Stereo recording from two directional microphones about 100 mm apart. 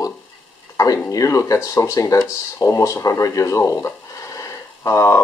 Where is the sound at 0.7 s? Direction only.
30° left (ahead or behind).